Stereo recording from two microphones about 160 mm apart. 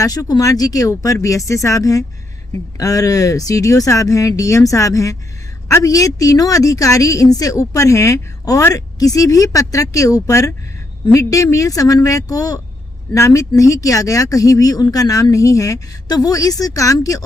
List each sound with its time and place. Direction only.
0.0 s a woman's voice: 20° left (ahead or behind)